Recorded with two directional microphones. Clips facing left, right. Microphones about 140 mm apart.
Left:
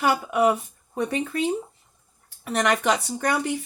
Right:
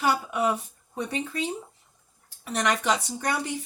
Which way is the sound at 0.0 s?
55° left (ahead or behind).